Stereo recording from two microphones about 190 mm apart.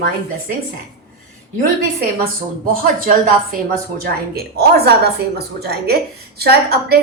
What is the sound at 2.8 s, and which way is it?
A woman's voice, 50° right (ahead or behind).